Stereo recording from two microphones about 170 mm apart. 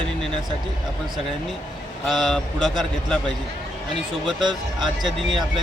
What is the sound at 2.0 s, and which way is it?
A man's voice, centre (ahead or behind).